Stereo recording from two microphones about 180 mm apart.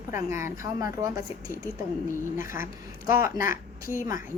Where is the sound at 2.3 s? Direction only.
15° right (ahead or behind).